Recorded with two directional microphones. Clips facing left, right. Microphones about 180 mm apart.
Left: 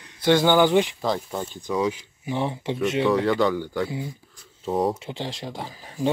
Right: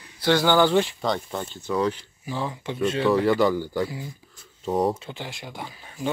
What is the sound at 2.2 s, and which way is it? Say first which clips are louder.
Speech: left 4 dB; 25° left (ahead or behind).